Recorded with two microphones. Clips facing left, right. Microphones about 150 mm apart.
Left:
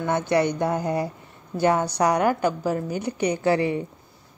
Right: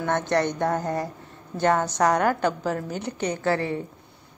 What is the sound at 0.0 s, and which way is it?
A woman's voice, 10° left (ahead or behind).